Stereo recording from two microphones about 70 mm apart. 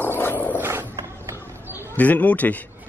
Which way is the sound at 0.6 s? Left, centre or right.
Right.